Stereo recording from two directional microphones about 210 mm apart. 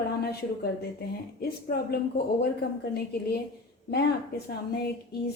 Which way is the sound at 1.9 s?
50° left (ahead or behind).